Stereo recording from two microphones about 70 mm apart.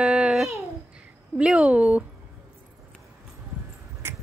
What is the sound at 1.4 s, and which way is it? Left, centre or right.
Speech, centre.